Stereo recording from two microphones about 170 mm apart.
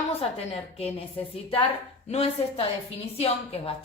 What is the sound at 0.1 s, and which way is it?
A woman's voice, 35° left (ahead or behind).